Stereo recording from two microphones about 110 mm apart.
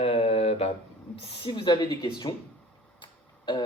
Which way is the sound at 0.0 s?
65° left (ahead or behind).